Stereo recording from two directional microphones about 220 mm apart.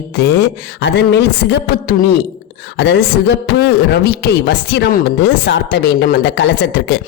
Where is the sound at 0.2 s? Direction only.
50° left (ahead or behind).